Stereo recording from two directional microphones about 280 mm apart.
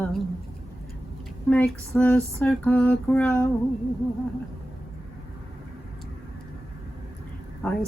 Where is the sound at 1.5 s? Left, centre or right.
Centre.